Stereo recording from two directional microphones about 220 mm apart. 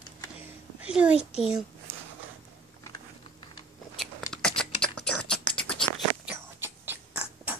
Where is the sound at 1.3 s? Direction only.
5° right (ahead or behind).